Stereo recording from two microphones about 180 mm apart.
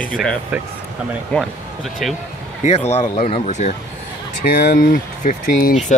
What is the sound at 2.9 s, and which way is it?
Speech, 35° left (ahead or behind).